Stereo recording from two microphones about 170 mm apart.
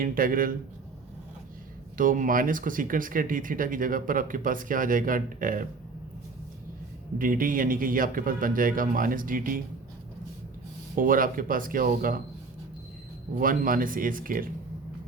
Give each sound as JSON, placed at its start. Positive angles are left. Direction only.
{"t": 0.0, "sound": "a man's voice", "side_deg": -55}
{"t": 2.0, "sound": "speech", "side_deg": -50}
{"t": 7.2, "sound": "a man's voice", "side_deg": -55}
{"t": 10.9, "sound": "a man's voice", "side_deg": -55}
{"t": 13.4, "sound": "a man's voice", "side_deg": -55}